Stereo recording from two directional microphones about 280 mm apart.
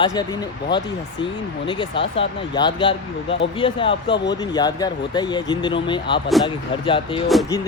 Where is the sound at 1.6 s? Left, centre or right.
Centre.